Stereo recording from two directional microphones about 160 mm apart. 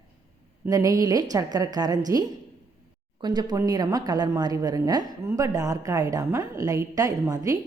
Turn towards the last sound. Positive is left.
turn(degrees=-20)  # may be behind; listen again after turning